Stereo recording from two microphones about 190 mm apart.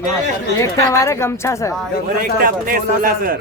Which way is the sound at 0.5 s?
15° left (ahead or behind).